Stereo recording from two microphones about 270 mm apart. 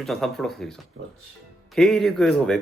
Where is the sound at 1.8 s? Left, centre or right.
Centre.